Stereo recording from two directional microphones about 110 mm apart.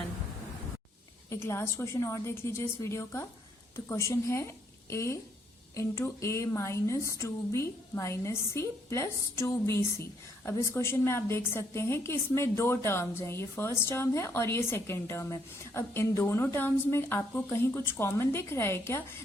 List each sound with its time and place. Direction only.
1.3 s a woman's voice: 25° left (ahead or behind)